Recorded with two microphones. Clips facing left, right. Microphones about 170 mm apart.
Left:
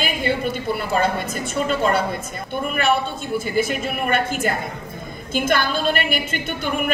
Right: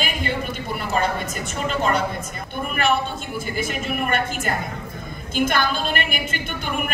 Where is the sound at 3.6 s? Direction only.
50° right (ahead or behind).